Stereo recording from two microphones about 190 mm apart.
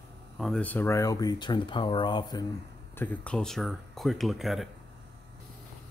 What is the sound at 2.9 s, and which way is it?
Speech, 5° left (ahead or behind).